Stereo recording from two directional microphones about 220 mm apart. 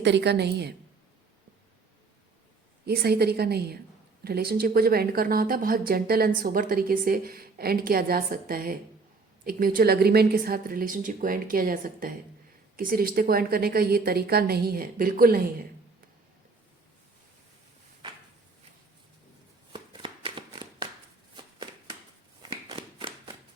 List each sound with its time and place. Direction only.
0.0 s speech: 50° right (ahead or behind)
2.8 s speech: 45° right (ahead or behind)
19.7 s shuffling cards: 20° right (ahead or behind)
22.7 s a sound: 25° right (ahead or behind)